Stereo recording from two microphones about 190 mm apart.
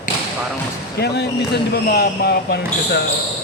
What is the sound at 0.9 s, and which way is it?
Speech, 60° left (ahead or behind).